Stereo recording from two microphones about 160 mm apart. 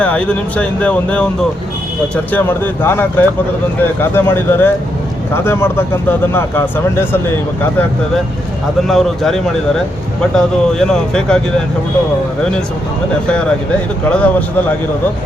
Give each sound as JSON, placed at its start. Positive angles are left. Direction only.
{"t": 0.0, "sound": "speech", "side_deg": 10}
{"t": 2.3, "sound": "speech", "side_deg": 15}
{"t": 8.8, "sound": "speech", "side_deg": 0}
{"t": 14.1, "sound": "speech", "side_deg": 10}